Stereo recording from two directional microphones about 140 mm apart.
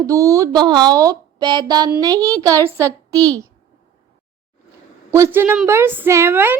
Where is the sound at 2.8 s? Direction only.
15° left (ahead or behind).